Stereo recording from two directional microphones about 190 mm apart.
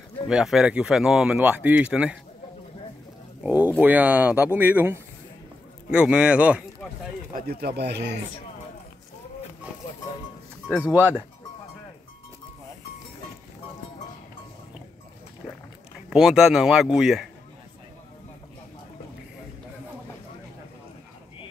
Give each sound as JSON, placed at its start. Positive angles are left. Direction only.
{"t": 0.3, "sound": "speech", "side_deg": -5}
{"t": 3.4, "sound": "speech", "side_deg": -10}
{"t": 7.3, "sound": "speech", "side_deg": -55}
{"t": 10.7, "sound": "speech", "side_deg": -5}
{"t": 16.1, "sound": "speech", "side_deg": 0}